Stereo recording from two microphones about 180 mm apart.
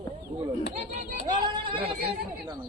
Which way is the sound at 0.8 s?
35° right (ahead or behind).